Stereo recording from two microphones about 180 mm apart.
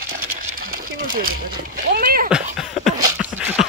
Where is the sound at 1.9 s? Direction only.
55° right (ahead or behind).